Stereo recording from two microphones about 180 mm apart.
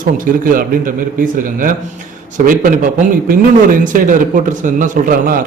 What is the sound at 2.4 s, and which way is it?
A man's voice, 50° right (ahead or behind).